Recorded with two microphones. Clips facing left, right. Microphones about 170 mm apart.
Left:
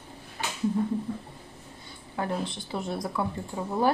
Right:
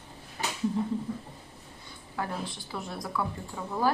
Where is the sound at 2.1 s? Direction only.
25° left (ahead or behind).